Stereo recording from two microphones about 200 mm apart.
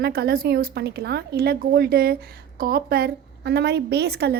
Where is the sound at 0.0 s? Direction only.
50° right (ahead or behind).